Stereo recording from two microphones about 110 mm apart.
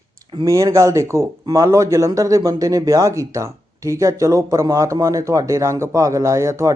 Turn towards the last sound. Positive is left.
turn(degrees=-25)  # may be behind; listen again after turning